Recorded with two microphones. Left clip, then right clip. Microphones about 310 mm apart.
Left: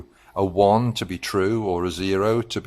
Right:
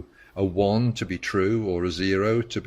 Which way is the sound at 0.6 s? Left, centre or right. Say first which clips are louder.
Left 8 dB; left.